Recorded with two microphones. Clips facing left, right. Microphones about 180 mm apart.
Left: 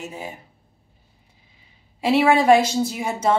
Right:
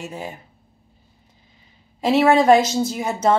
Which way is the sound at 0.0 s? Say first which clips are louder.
Right 2 dB; 5° left (ahead or behind).